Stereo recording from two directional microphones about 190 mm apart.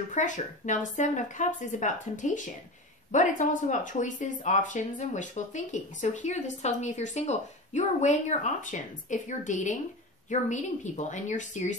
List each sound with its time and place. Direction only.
0.1 s speech: 40° left (ahead or behind)